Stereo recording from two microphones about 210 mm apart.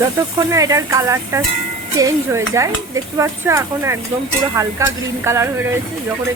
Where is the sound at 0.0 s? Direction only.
15° right (ahead or behind).